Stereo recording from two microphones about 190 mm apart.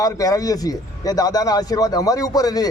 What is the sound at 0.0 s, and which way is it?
Speech, 20° left (ahead or behind).